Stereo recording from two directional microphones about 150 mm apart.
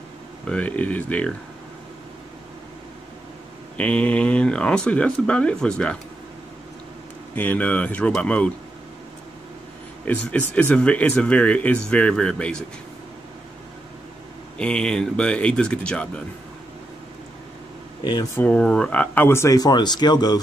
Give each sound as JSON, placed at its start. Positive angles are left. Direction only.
{"t": 0.5, "sound": "speech", "side_deg": 10}
{"t": 3.7, "sound": "speech", "side_deg": 10}
{"t": 7.3, "sound": "speech", "side_deg": 10}
{"t": 10.0, "sound": "speech", "side_deg": 10}
{"t": 14.6, "sound": "speech", "side_deg": 5}
{"t": 18.3, "sound": "speech", "side_deg": 10}